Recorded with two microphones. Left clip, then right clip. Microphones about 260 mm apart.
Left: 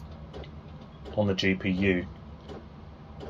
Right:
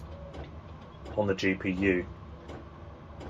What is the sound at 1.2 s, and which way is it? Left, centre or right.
Speech, left.